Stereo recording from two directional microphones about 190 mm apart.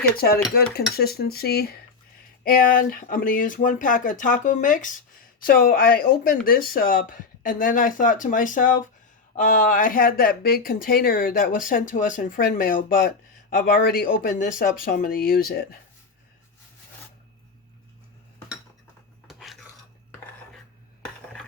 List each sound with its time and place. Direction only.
0.9 s cutlery: 55° left (ahead or behind)
2.4 s speech: 50° left (ahead or behind)
19.3 s dishes: centre (ahead or behind)